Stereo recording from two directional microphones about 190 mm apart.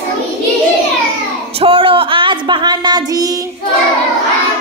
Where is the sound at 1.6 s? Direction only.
25° right (ahead or behind).